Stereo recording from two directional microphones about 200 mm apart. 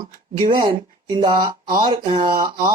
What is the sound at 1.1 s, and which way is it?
Speech, 20° right (ahead or behind).